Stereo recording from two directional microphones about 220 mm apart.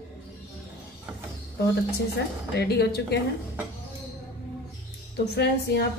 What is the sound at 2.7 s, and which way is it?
Speech, 45° left (ahead or behind).